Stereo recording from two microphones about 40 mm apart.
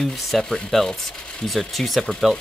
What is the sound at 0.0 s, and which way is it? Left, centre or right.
Speech, centre.